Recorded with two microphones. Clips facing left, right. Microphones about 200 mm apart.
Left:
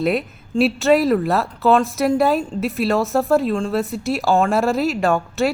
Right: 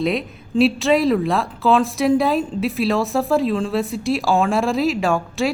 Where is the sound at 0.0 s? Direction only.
5° left (ahead or behind).